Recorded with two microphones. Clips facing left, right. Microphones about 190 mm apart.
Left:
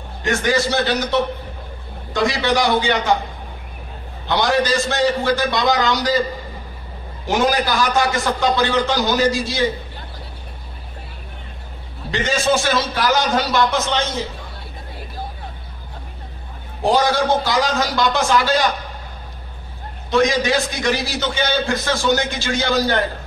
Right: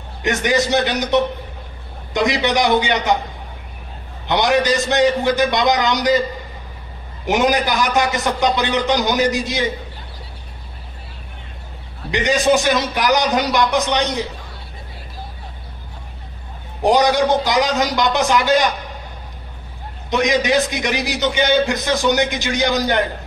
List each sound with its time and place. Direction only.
0.2 s a man's voice: 20° right (ahead or behind)
4.3 s a man's voice: 20° right (ahead or behind)
7.2 s a man's voice: 20° right (ahead or behind)
12.1 s a man's voice: 15° right (ahead or behind)
16.8 s a man's voice: 20° right (ahead or behind)
20.1 s a man's voice: 20° right (ahead or behind)